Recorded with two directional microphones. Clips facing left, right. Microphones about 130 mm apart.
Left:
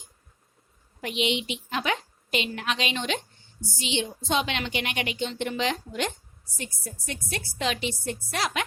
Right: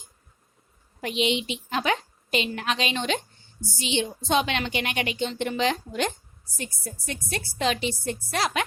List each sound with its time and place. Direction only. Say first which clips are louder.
1.0 s a woman's voice: right 2 dB; 35° right (ahead or behind)